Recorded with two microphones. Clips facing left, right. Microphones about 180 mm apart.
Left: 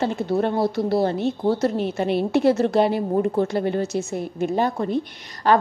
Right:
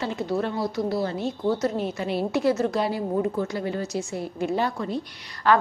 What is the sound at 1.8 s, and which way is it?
A woman's voice, 60° left (ahead or behind).